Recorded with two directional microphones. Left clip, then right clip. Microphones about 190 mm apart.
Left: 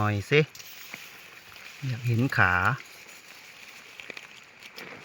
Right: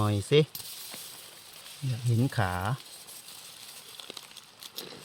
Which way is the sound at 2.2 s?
10° right (ahead or behind).